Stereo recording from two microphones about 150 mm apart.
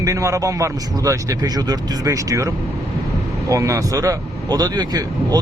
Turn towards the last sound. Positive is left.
turn(degrees=-25)  # may be behind; listen again after turning